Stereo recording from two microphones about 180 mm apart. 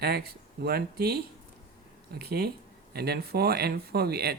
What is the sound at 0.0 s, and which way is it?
Speech, 60° right (ahead or behind).